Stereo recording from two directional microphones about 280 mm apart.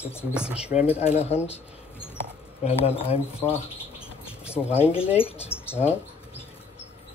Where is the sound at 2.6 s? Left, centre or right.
Left.